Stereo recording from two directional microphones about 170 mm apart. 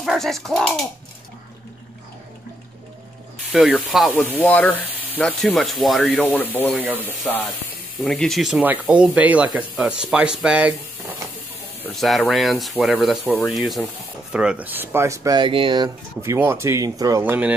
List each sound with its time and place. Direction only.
0.0 s speech: centre (ahead or behind)
3.5 s speech: 5° right (ahead or behind)
4.4 s speech: 10° left (ahead or behind)
11.9 s speech: centre (ahead or behind); by 17.2 s 20° right (ahead or behind)
17.2 s speech: 10° right (ahead or behind)